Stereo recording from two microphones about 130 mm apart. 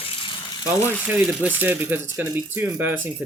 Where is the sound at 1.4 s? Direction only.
15° right (ahead or behind).